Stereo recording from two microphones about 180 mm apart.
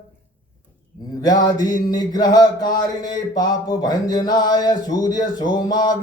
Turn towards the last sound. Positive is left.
turn(degrees=20)  # may be behind; listen again after turning